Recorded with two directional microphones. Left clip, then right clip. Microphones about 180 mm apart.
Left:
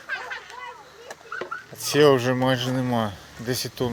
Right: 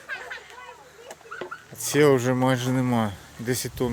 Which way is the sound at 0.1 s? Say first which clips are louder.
Left 3 dB; 35° left (ahead or behind).